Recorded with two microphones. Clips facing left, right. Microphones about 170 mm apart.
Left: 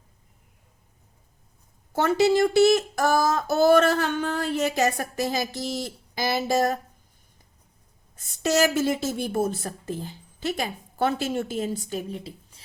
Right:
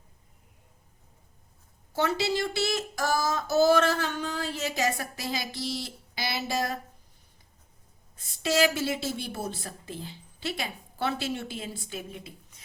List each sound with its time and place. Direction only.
1.9 s speech: 50° left (ahead or behind)
8.1 s speech: 45° left (ahead or behind)